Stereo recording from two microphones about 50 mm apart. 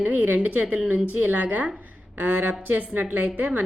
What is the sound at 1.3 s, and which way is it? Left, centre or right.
A woman's voice, right.